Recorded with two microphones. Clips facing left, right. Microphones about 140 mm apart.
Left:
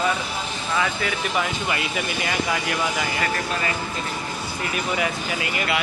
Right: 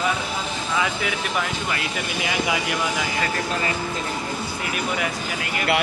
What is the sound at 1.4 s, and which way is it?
Speech, 5° left (ahead or behind).